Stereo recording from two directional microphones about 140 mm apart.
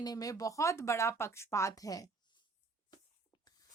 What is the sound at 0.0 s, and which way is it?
Speech, 25° left (ahead or behind).